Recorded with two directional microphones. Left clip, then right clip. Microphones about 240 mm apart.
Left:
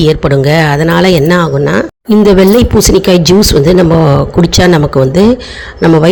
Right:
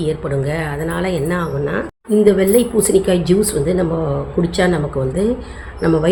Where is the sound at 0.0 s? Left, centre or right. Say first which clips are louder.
Left 12 dB; left.